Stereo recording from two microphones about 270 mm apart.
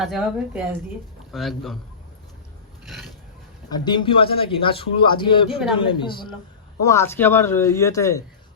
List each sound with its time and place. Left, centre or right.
0.0 s a woman's voice: centre
2.8 s a sound: centre
3.7 s a man's voice: centre
5.5 s a woman's voice: centre
5.7 s a man's voice: centre